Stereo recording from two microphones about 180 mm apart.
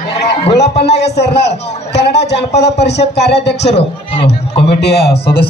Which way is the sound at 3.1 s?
70° left (ahead or behind).